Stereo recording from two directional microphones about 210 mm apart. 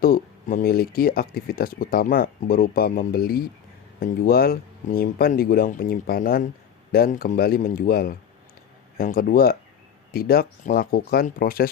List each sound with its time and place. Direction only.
0.0 s speech: 40° left (ahead or behind)